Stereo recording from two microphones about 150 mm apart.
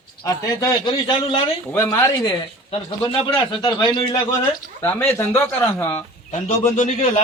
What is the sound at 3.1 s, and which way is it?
A man's voice, 35° left (ahead or behind).